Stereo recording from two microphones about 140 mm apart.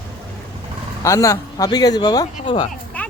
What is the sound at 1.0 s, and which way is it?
Speech, 20° left (ahead or behind).